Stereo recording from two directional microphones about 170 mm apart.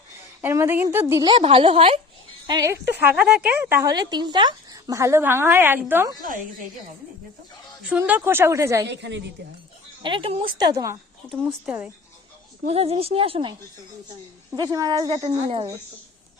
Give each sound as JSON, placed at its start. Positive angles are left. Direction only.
{"t": 0.4, "sound": "a woman's voice", "side_deg": -15}
{"t": 1.3, "sound": "a woman's voice", "side_deg": -30}
{"t": 2.5, "sound": "speech", "side_deg": -20}
{"t": 3.0, "sound": "a woman's voice", "side_deg": -10}
{"t": 3.8, "sound": "a woman's voice", "side_deg": -25}
{"t": 7.9, "sound": "a woman's voice", "side_deg": -10}
{"t": 8.9, "sound": "a woman's voice", "side_deg": -90}
{"t": 10.0, "sound": "speech", "side_deg": -30}
{"t": 11.4, "sound": "a woman's voice", "side_deg": -5}
{"t": 12.6, "sound": "a woman's voice", "side_deg": -35}